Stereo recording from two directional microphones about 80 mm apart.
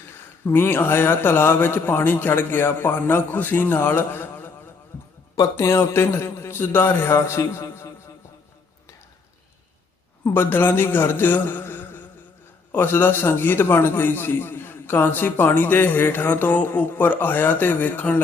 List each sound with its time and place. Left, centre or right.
0.4 s a man's voice: left
5.4 s a man's voice: left
10.2 s a man's voice: left